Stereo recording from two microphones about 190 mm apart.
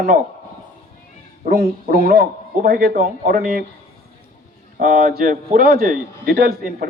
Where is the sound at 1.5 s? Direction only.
55° right (ahead or behind).